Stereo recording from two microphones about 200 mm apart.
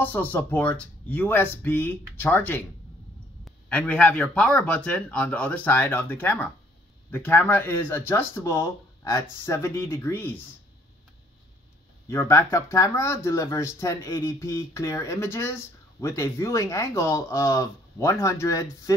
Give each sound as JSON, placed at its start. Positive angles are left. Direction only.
{"t": 0.0, "sound": "speech", "side_deg": 10}
{"t": 12.1, "sound": "speech", "side_deg": 15}